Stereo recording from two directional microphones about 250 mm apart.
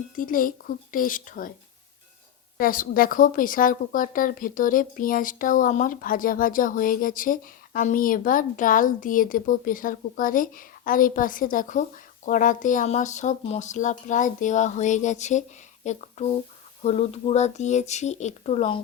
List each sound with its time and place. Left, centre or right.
0.2 s a woman's voice: left
2.6 s a woman's voice: left